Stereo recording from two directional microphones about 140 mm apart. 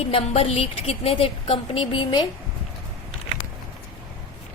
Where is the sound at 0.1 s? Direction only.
45° left (ahead or behind).